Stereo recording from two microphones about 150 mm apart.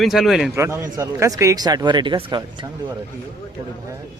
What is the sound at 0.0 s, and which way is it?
Speech, centre (ahead or behind).